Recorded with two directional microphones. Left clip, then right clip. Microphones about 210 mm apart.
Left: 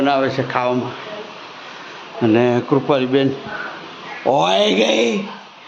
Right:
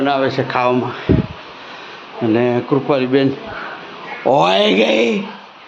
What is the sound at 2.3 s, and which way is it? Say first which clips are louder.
Speech: even; 5° left (ahead or behind).